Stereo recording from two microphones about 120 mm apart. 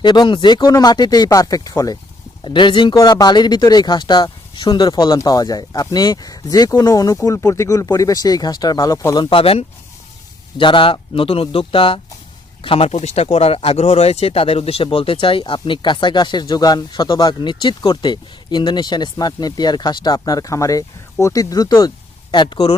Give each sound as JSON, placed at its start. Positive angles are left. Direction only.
{"t": 0.0, "sound": "speech", "side_deg": 40}
{"t": 2.4, "sound": "speech", "side_deg": 40}
{"t": 2.9, "sound": "speech", "side_deg": 30}
{"t": 9.1, "sound": "speech", "side_deg": 45}